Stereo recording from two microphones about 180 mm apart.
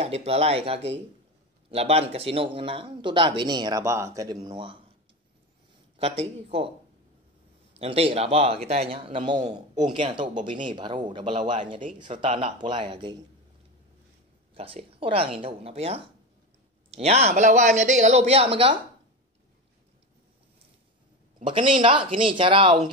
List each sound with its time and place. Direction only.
0.0 s speech: 35° right (ahead or behind)
5.9 s speech: 30° right (ahead or behind)
7.7 s speech: 35° right (ahead or behind)
14.5 s speech: 30° right (ahead or behind)
21.5 s speech: 25° right (ahead or behind)